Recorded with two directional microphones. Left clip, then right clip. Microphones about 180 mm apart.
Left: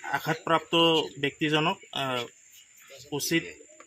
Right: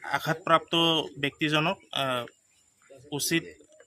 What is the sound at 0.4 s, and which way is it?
Speech, 30° right (ahead or behind).